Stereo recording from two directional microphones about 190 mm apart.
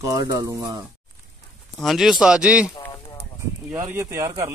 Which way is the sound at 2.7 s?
20° left (ahead or behind).